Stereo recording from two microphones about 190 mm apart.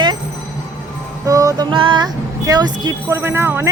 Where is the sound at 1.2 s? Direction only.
15° right (ahead or behind).